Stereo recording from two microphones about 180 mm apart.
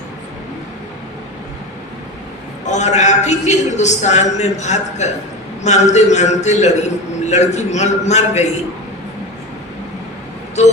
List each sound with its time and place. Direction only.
2.6 s a man's voice: 40° left (ahead or behind)
10.6 s a man's voice: 40° left (ahead or behind)